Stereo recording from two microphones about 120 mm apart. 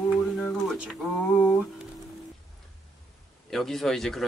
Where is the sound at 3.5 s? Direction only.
5° left (ahead or behind).